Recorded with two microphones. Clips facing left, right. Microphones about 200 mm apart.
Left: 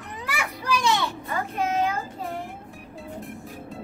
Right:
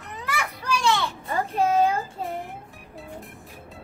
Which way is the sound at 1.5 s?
30° right (ahead or behind).